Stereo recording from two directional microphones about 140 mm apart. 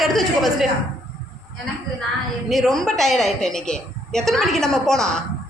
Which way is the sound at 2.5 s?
5° left (ahead or behind).